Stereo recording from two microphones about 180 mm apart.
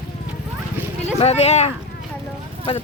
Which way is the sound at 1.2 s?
35° left (ahead or behind).